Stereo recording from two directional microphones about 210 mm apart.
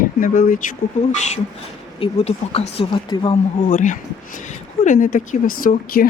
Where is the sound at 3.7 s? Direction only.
35° left (ahead or behind).